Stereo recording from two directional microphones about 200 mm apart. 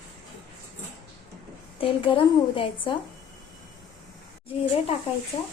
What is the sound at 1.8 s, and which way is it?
Speech, 25° left (ahead or behind).